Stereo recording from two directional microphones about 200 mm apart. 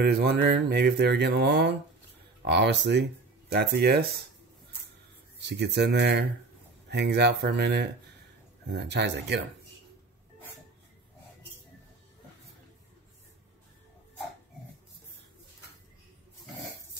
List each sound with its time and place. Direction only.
0.0 s mantra: 55° right (ahead or behind)
3.5 s speech: 55° right (ahead or behind)
5.5 s mantra: 60° right (ahead or behind)